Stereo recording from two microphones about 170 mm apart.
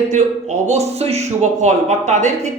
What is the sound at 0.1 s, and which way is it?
Speech, 45° right (ahead or behind).